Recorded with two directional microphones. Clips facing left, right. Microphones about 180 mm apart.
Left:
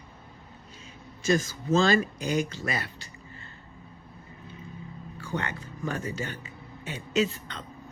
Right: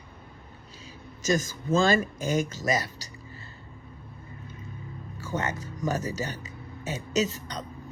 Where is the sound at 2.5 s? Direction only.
40° right (ahead or behind).